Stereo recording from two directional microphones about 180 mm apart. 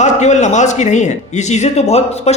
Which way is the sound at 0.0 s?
40° left (ahead or behind).